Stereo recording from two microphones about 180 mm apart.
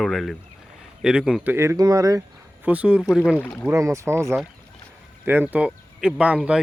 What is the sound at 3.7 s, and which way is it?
Speech, 15° right (ahead or behind).